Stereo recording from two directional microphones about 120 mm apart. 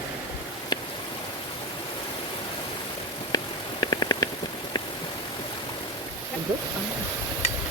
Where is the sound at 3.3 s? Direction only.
35° left (ahead or behind).